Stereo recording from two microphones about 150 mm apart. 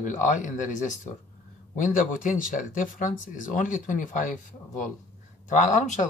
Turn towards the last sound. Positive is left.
turn(degrees=55)  # may be behind; listen again after turning